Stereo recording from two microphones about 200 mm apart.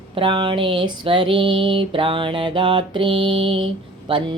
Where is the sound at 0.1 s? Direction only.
25° right (ahead or behind).